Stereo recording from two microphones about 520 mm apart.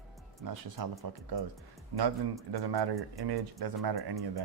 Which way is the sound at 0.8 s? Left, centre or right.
Right.